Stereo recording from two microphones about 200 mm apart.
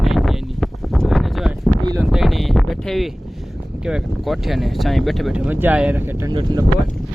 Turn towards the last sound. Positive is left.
turn(degrees=-20)  # may be behind; listen again after turning